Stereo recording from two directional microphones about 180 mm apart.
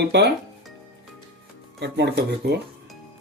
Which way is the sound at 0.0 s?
65° right (ahead or behind).